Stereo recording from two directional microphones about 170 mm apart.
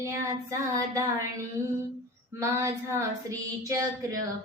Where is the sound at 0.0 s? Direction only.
15° right (ahead or behind).